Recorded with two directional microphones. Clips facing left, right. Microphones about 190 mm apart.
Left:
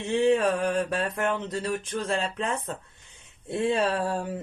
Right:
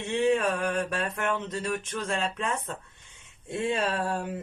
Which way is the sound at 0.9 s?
35° left (ahead or behind).